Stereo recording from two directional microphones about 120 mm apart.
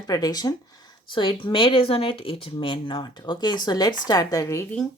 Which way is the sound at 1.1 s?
45° left (ahead or behind).